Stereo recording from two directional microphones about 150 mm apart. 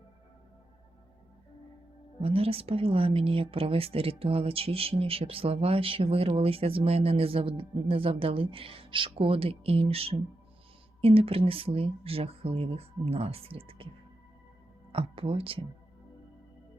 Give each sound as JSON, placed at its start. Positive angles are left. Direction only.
{"t": 2.2, "sound": "speech", "side_deg": -40}
{"t": 14.9, "sound": "speech", "side_deg": -40}